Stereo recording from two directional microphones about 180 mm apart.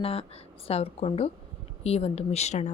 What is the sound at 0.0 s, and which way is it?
Speech, 35° left (ahead or behind).